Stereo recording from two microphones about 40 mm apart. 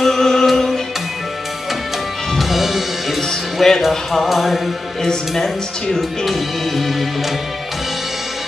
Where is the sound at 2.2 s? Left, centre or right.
Centre.